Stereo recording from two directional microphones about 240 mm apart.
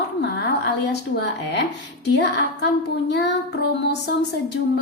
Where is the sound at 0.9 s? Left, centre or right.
Left.